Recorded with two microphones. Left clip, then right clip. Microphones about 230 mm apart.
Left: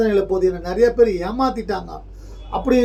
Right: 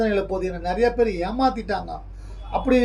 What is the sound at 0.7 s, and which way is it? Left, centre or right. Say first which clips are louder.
Speech: left 5 dB; centre.